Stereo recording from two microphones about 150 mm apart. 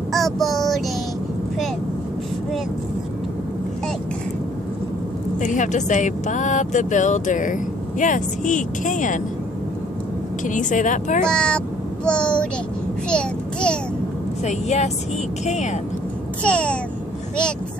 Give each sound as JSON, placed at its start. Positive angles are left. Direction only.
{"t": 0.1, "sound": "child singing", "side_deg": 0}
{"t": 5.4, "sound": "speech", "side_deg": 55}
{"t": 10.4, "sound": "speech", "side_deg": 55}
{"t": 11.2, "sound": "a child's voice", "side_deg": 5}
{"t": 14.4, "sound": "speech", "side_deg": 50}
{"t": 16.4, "sound": "a child's voice", "side_deg": 10}